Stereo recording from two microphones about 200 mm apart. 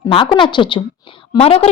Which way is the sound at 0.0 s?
25° left (ahead or behind).